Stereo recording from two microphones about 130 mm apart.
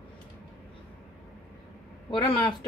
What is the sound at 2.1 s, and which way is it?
Speech, 40° left (ahead or behind).